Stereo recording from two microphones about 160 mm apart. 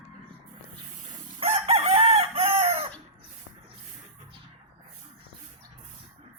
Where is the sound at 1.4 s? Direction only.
40° right (ahead or behind).